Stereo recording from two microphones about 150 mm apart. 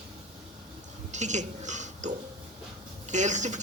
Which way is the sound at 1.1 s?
50° right (ahead or behind).